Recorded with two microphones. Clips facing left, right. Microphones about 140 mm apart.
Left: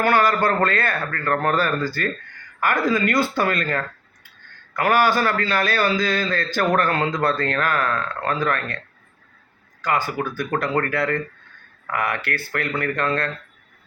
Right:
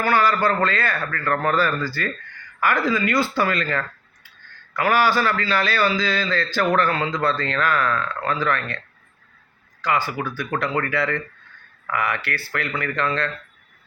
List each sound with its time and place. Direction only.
0.0 s a man's voice: 50° left (ahead or behind)
9.8 s a man's voice: 45° left (ahead or behind)